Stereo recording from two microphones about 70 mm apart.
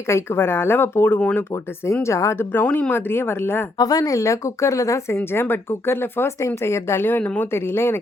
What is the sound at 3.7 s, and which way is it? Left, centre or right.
Speech, left.